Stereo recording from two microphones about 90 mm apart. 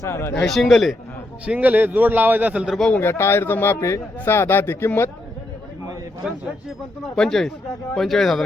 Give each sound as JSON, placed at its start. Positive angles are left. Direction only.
{"t": 0.0, "sound": "a man's voice", "side_deg": 30}
{"t": 0.4, "sound": "speech", "side_deg": 0}
{"t": 1.5, "sound": "a man's voice", "side_deg": -15}
{"t": 2.9, "sound": "a man's voice", "side_deg": 25}
{"t": 7.0, "sound": "speech", "side_deg": 5}